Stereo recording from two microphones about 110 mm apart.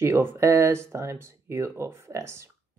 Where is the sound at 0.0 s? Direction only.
20° right (ahead or behind).